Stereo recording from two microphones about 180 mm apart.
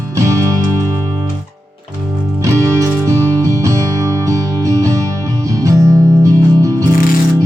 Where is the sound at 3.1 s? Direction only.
15° right (ahead or behind).